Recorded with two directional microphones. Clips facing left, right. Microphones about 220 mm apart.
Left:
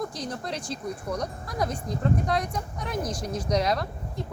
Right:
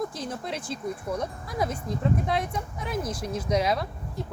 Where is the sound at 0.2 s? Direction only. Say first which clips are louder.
Even; 5° right (ahead or behind).